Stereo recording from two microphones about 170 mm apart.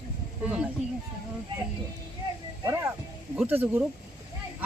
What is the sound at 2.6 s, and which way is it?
A man's voice, 15° right (ahead or behind).